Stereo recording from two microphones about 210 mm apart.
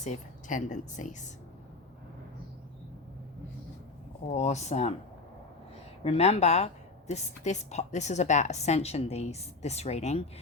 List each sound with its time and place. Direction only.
0.0 s a woman's voice: 35° left (ahead or behind)
4.3 s a woman's voice: 35° left (ahead or behind)
6.0 s a woman's voice: 30° left (ahead or behind)